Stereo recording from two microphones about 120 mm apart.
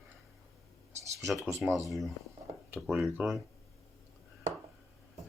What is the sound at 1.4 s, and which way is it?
Speech, 25° right (ahead or behind).